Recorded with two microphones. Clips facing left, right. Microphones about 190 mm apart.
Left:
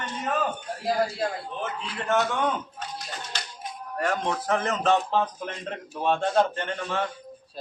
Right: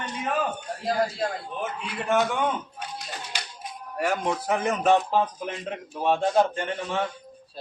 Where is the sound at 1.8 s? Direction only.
10° right (ahead or behind).